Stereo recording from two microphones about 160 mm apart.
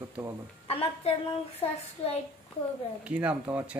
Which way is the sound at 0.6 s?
40° left (ahead or behind).